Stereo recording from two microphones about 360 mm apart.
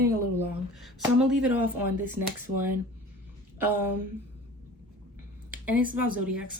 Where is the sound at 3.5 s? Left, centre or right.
Centre.